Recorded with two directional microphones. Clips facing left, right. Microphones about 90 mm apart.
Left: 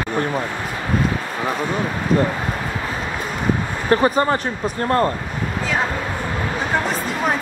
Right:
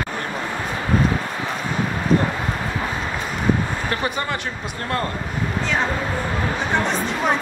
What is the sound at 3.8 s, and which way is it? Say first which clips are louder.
Speech: left 13 dB; 35° left (ahead or behind).